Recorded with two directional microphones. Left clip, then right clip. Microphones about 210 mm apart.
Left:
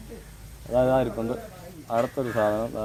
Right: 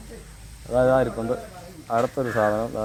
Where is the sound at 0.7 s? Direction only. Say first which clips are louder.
Right 3 dB; 30° right (ahead or behind).